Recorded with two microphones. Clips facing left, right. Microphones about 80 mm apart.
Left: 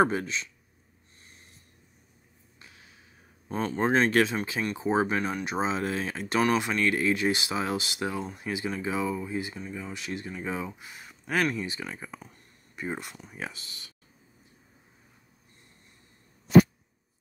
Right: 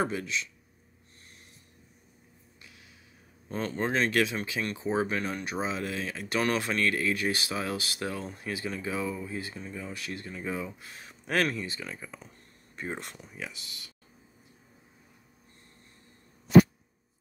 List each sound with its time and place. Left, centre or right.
0.0 s speech: left
2.6 s a sound: left
3.4 s speech: centre
6.4 s speech: centre
9.6 s speech: centre
9.9 s speech: left
11.0 s speech: centre
13.4 s speech: left